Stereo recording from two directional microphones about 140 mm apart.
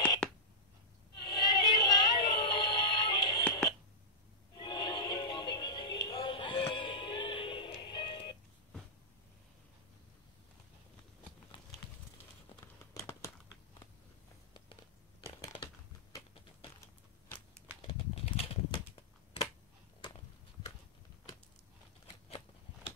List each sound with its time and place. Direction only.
1.2 s synthetic singing: 30° left (ahead or behind)
4.6 s music: 30° left (ahead or behind)
11.5 s clip-clop: 35° left (ahead or behind)
12.9 s crumpling: 20° left (ahead or behind)
14.5 s a sound: 35° left (ahead or behind)
17.8 s typewriter: 45° left (ahead or behind)